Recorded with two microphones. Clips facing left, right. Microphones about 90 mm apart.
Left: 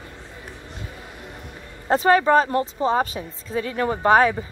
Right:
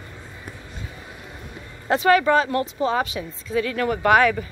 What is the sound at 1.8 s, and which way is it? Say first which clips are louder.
Speech: even; 35° left (ahead or behind).